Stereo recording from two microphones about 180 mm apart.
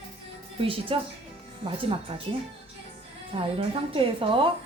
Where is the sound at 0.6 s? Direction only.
30° right (ahead or behind).